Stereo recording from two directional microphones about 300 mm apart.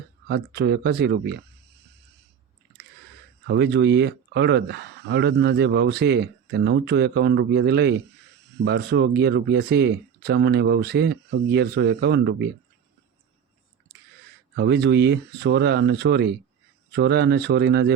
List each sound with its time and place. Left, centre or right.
0.3 s speech: right
3.4 s speech: right
14.5 s speech: right